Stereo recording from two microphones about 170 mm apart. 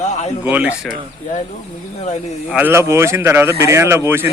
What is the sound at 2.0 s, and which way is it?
Speech, 40° left (ahead or behind).